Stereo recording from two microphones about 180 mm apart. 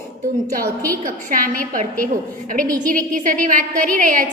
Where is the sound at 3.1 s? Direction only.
45° right (ahead or behind).